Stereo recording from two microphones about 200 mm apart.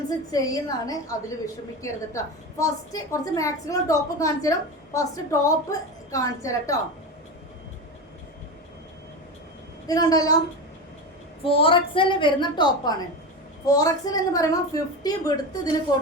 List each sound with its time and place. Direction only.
0.3 s a woman's voice: 20° left (ahead or behind)
9.8 s a woman's voice: 20° left (ahead or behind)
11.4 s a woman's voice: 25° left (ahead or behind)